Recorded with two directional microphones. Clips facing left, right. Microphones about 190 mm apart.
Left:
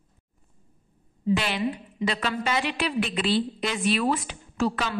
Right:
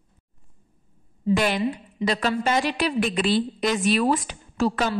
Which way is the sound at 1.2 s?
45° right (ahead or behind).